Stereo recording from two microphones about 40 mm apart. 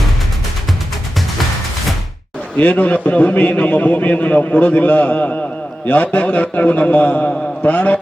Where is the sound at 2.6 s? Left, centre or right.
Left.